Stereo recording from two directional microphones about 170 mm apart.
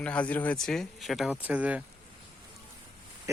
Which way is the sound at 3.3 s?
20° right (ahead or behind).